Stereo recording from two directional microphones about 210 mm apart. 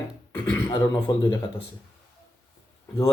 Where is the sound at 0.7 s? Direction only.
20° left (ahead or behind).